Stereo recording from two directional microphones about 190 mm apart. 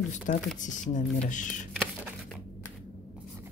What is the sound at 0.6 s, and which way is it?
Speech, 40° left (ahead or behind).